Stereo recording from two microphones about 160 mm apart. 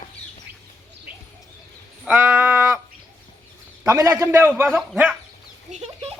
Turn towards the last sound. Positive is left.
turn(degrees=-40)  # may be behind; listen again after turning